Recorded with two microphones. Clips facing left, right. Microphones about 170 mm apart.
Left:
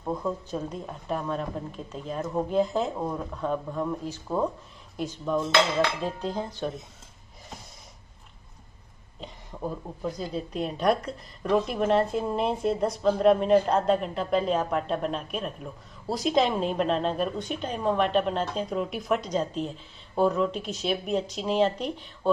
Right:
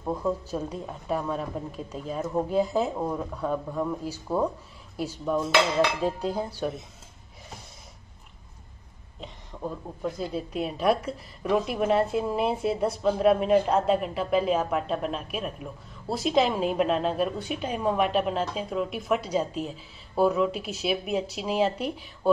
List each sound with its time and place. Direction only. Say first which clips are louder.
0.0 s a woman's voice: right 2 dB; 10° right (ahead or behind)
9.5 s a sound: left 1 dB; 15° left (ahead or behind)
10.0 s a woman's voice: right 1 dB; 5° right (ahead or behind)